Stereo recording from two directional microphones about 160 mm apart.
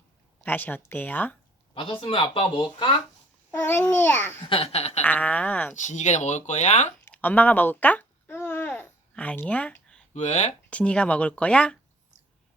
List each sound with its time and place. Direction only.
0.4 s speech: 10° left (ahead or behind)
1.7 s speech: 35° left (ahead or behind)
3.5 s speech: 15° left (ahead or behind)
4.4 s speech: 35° left (ahead or behind)
5.0 s speech: 10° left (ahead or behind)
5.7 s speech: 50° left (ahead or behind)
7.0 s babbling: 10° left (ahead or behind)
10.2 s speech: 45° left (ahead or behind)
10.7 s speech: 10° left (ahead or behind)